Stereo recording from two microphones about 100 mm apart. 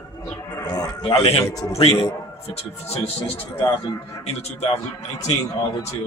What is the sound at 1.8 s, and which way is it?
A man's voice, 85° left.